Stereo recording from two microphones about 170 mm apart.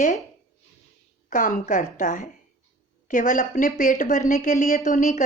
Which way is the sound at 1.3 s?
45° left (ahead or behind).